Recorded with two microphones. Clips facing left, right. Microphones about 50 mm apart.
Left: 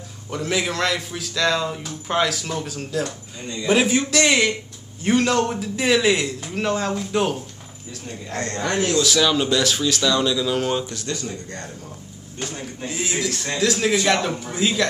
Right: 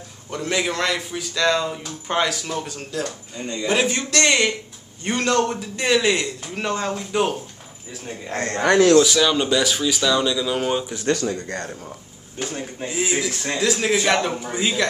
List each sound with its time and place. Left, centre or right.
0.3 s a man's voice: centre
8.1 s a man's voice: right
9.0 s a man's voice: centre
12.4 s a man's voice: centre
12.8 s a man's voice: centre